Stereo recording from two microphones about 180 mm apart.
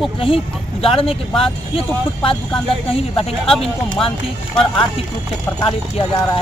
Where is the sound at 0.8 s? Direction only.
30° left (ahead or behind).